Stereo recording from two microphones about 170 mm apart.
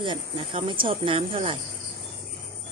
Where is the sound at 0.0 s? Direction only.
30° right (ahead or behind).